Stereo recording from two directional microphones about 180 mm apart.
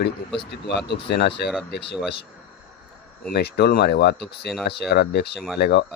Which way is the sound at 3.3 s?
65° left (ahead or behind).